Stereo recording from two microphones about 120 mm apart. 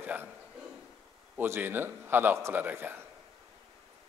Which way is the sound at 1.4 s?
20° right (ahead or behind).